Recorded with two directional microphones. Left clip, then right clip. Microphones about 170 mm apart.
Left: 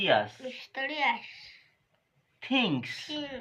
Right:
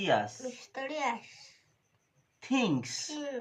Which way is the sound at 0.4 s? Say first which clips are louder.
Left 4 dB; 25° right (ahead or behind).